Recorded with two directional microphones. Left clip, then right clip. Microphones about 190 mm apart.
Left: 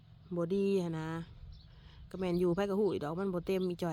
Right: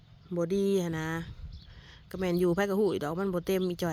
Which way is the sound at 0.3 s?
10° right (ahead or behind).